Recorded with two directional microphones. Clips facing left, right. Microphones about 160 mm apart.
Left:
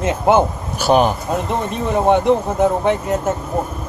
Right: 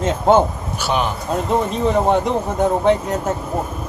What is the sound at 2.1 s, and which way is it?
Speech, 5° left (ahead or behind).